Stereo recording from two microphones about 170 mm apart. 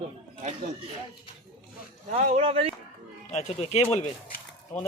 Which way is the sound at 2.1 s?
40° right (ahead or behind).